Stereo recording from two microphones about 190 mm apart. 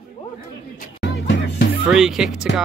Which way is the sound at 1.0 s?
60° left (ahead or behind).